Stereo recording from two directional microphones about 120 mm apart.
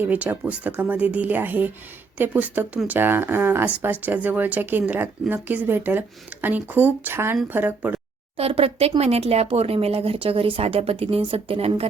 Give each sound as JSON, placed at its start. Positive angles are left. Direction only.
{"t": 0.0, "sound": "speech", "side_deg": -15}
{"t": 8.4, "sound": "speech", "side_deg": -55}